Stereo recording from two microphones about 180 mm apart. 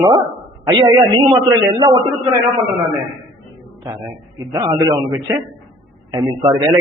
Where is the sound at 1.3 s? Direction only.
20° right (ahead or behind).